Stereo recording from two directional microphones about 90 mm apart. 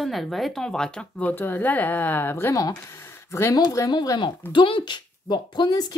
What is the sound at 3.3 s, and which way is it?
Speech, 35° left (ahead or behind).